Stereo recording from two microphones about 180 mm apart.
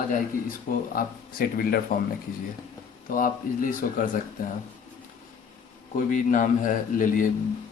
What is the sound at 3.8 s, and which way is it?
Speech, 50° left (ahead or behind).